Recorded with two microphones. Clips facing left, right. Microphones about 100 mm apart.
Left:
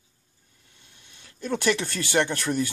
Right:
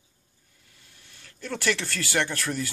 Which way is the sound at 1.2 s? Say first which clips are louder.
Left 5 dB; 20° left (ahead or behind).